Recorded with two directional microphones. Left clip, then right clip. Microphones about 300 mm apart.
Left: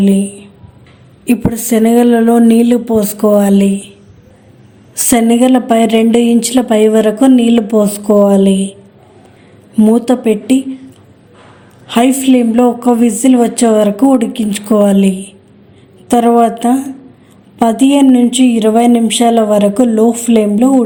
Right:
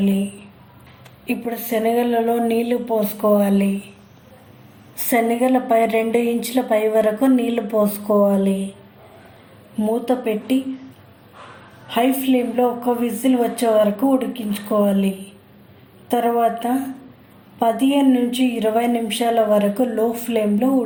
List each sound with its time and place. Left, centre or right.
0.0 s a woman's voice: left
4.9 s speech: left
9.7 s speech: left
11.9 s speech: left